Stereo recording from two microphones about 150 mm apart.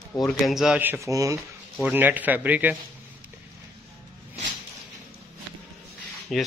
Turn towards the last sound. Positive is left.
turn(degrees=0)  # may be behind; listen again after turning